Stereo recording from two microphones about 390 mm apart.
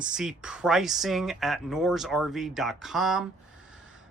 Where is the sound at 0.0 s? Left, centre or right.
Centre.